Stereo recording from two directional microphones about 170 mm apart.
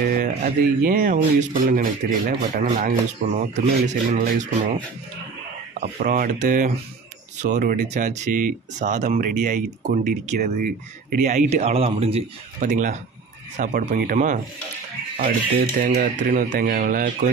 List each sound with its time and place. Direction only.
0.0 s speech: 65° right (ahead or behind); by 4.7 s 45° right (ahead or behind)
5.8 s speech: 55° right (ahead or behind)
10.4 s speech: 55° right (ahead or behind); by 12.2 s 35° right (ahead or behind)
12.5 s speech: 50° right (ahead or behind)
15.9 s speech: 45° right (ahead or behind)